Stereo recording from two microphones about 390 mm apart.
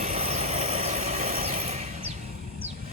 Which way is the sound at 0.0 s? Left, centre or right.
Centre.